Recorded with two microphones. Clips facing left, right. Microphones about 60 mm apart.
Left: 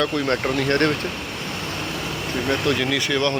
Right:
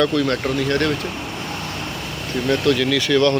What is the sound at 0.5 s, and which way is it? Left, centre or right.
Speech, left.